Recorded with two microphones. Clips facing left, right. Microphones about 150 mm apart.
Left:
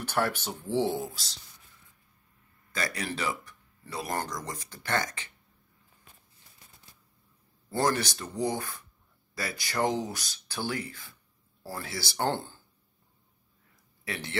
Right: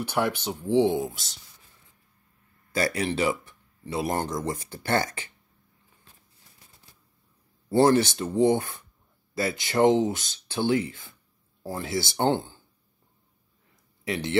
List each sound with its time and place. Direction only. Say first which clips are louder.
0.0 s speech: right 3 dB; 10° right (ahead or behind)
2.7 s speech: right 8 dB; 30° right (ahead or behind)
7.7 s speech: right 8 dB; 25° right (ahead or behind)
14.0 s speech: right 8 dB; 20° right (ahead or behind)